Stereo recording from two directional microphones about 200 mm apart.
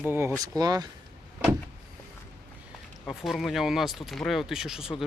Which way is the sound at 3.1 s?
Centre (ahead or behind).